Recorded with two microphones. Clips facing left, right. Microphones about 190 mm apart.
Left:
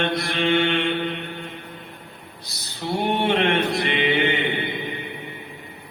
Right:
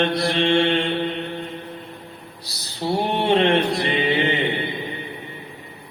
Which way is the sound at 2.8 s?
30° right (ahead or behind).